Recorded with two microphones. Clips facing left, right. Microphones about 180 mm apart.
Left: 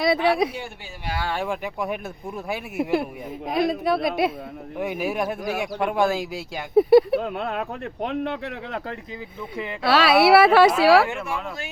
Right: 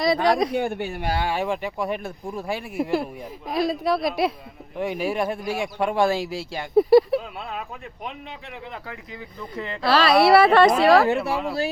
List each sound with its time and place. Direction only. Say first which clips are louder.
0.0 s speech: even; 5° left (ahead or behind)
0.5 s speech: right 11 dB; 55° right (ahead or behind)
1.4 s speech: right 2 dB; centre (ahead or behind)
7.2 s speech: left 6 dB; 60° left (ahead or behind)
9.6 s speech: even; 5° left (ahead or behind)